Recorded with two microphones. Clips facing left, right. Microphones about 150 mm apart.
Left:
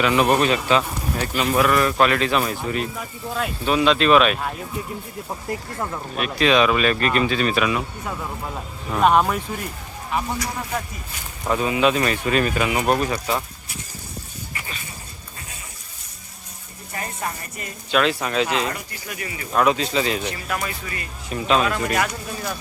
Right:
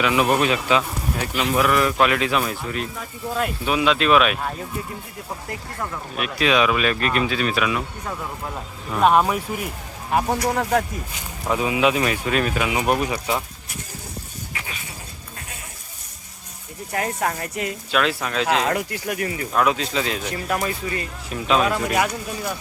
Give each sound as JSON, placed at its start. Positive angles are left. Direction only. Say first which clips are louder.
{"t": 0.0, "sound": "speech", "louder": "left 1 dB", "side_deg": 0}
{"t": 5.5, "sound": "speech", "louder": "left 4 dB", "side_deg": 20}
{"t": 6.1, "sound": "speech", "louder": "left 2 dB", "side_deg": -5}
{"t": 10.1, "sound": "speech", "louder": "right 5 dB", "side_deg": -50}
{"t": 11.4, "sound": "speech", "louder": "left 1 dB", "side_deg": -5}
{"t": 16.9, "sound": "speech", "louder": "right 6 dB", "side_deg": -75}
{"t": 17.9, "sound": "speech", "louder": "left 3 dB", "side_deg": 0}
{"t": 18.4, "sound": "speech", "louder": "right 4 dB", "side_deg": -70}
{"t": 19.5, "sound": "speech", "louder": "left 2 dB", "side_deg": 0}
{"t": 20.3, "sound": "speech", "louder": "right 4 dB", "side_deg": -35}
{"t": 21.2, "sound": "speech", "louder": "even", "side_deg": 0}